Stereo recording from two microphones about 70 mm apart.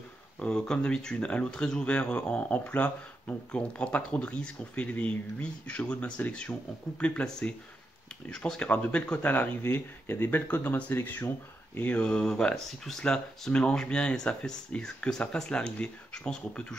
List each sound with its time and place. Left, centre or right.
0.4 s speech: centre; by 11.9 s left
11.9 s speech: centre